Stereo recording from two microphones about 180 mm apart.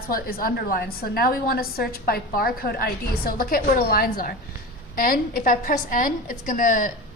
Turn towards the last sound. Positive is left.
turn(degrees=50)  # may be behind; listen again after turning